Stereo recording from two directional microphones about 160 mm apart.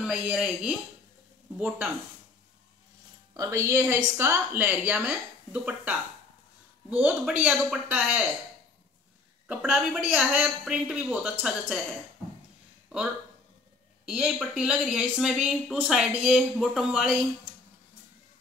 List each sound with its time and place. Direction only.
0.0 s speech: 5° right (ahead or behind)
3.3 s a woman's voice: 20° right (ahead or behind)
9.5 s speech: 5° right (ahead or behind)
14.0 s speech: centre (ahead or behind)